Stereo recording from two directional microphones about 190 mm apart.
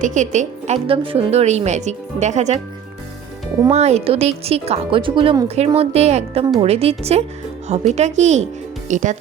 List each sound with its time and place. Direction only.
0.0 s speech: 40° right (ahead or behind)
3.7 s speech: 35° right (ahead or behind)